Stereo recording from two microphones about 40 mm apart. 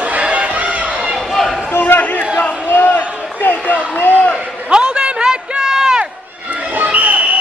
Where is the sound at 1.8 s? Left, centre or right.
Left.